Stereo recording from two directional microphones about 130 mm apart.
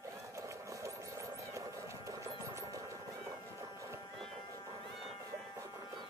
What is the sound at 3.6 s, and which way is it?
Clip-clop, 20° right (ahead or behind).